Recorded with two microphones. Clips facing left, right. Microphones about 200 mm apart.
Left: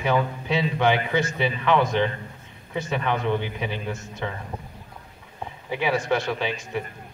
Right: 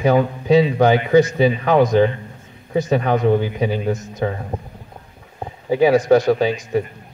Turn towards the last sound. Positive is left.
turn(degrees=-40)  # may be behind; listen again after turning